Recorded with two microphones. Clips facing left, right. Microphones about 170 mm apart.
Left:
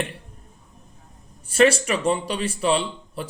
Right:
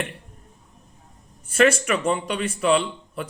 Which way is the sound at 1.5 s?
30° left (ahead or behind).